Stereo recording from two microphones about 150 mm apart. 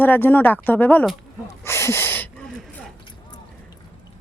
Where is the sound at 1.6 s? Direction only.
15° left (ahead or behind).